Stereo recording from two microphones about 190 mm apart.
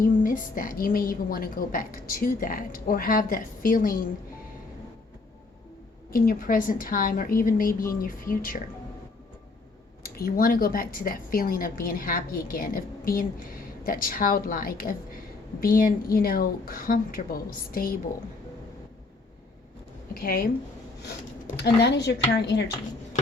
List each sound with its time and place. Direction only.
0.0 s a woman's voice: 45° left (ahead or behind)
6.1 s a woman's voice: 50° left (ahead or behind)
10.0 s a woman's voice: 50° left (ahead or behind)
20.1 s a woman's voice: 50° left (ahead or behind)
21.5 s speech: 60° left (ahead or behind)